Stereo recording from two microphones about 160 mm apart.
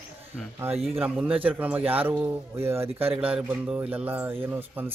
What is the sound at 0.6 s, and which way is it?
A man's voice, 15° right (ahead or behind).